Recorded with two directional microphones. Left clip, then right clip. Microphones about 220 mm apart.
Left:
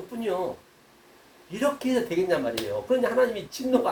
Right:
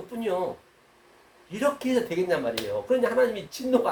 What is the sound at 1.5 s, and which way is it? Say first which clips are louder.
Speech: even; 25° right (ahead or behind).